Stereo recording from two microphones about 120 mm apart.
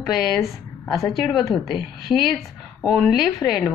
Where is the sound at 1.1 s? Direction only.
Centre (ahead or behind).